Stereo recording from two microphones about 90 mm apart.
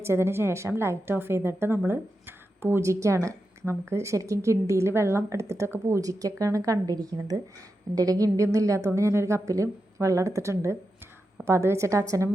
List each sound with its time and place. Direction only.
0.0 s a woman's voice: 30° right (ahead or behind)